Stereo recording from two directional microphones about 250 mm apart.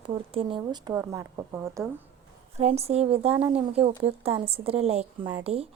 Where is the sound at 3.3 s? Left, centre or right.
Centre.